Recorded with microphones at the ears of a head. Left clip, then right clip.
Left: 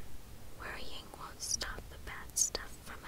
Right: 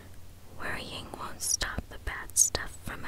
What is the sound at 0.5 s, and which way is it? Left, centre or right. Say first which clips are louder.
Whispering: right 8 dB; right.